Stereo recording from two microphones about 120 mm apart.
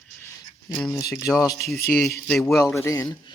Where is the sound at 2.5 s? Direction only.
25° left (ahead or behind).